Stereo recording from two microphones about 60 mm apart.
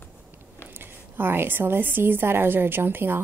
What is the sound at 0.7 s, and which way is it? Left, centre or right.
A woman's voice, right.